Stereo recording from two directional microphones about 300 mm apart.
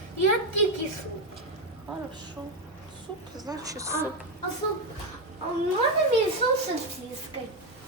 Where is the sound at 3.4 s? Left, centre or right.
Centre.